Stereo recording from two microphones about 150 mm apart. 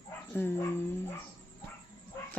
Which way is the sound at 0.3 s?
15° left (ahead or behind).